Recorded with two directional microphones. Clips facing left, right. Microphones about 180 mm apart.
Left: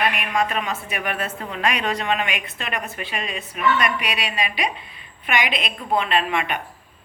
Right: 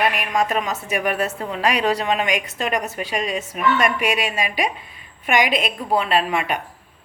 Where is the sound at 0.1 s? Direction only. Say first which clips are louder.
Right 2 dB; 40° right (ahead or behind).